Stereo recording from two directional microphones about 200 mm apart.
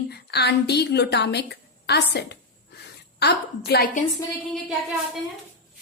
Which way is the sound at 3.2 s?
55° left (ahead or behind).